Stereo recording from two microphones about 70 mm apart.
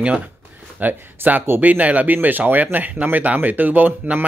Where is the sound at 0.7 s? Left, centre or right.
Right.